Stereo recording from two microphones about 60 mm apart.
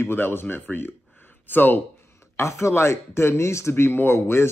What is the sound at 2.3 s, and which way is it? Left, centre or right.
Speech, left.